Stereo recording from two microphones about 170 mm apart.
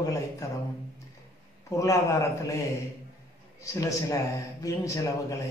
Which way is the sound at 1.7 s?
20° left (ahead or behind).